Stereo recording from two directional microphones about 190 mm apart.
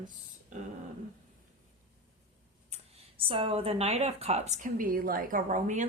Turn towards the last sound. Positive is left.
turn(degrees=-40)  # may be behind; listen again after turning